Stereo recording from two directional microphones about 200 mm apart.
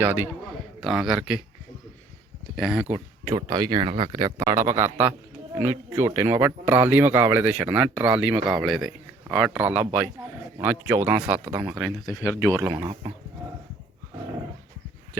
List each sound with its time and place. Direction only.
0.0 s a man's voice: 10° right (ahead or behind)
2.6 s speech: 5° right (ahead or behind)
12.1 s speech: 5° left (ahead or behind)
12.5 s speech: 10° right (ahead or behind)
12.9 s speech: 25° right (ahead or behind)